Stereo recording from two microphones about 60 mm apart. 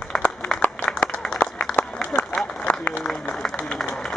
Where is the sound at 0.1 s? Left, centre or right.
Centre.